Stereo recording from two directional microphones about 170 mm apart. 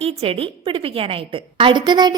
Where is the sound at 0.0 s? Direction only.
35° right (ahead or behind).